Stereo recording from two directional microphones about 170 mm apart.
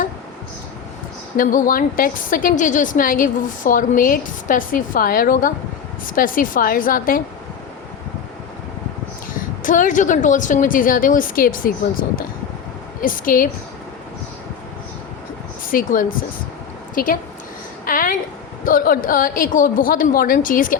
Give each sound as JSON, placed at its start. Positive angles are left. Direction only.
{"t": 1.4, "sound": "a woman's voice", "side_deg": 55}
{"t": 9.6, "sound": "a woman's voice", "side_deg": 50}
{"t": 15.7, "sound": "a woman's voice", "side_deg": 55}
{"t": 17.8, "sound": "a sound", "side_deg": 55}
{"t": 18.6, "sound": "a woman's voice", "side_deg": 55}